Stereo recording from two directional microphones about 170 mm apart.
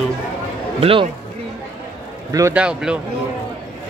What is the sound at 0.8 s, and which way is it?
Speech, 35° right (ahead or behind).